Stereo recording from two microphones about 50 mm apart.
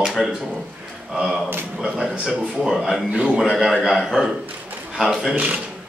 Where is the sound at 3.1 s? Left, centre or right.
Right.